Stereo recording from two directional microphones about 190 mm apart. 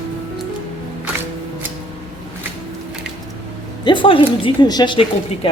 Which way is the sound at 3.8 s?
25° left (ahead or behind).